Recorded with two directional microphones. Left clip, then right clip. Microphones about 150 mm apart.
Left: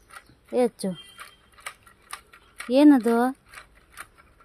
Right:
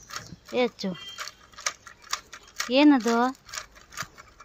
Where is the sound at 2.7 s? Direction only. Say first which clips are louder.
Left 2 dB; 40° left (ahead or behind).